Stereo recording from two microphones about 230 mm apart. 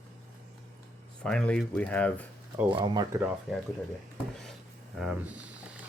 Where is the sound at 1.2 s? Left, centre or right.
Centre.